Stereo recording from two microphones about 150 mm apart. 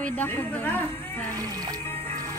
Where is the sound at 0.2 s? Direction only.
10° left (ahead or behind).